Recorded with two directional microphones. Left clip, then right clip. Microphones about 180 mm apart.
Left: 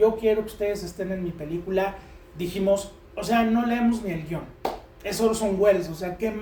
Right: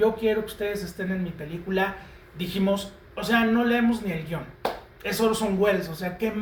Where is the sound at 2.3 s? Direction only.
30° left (ahead or behind).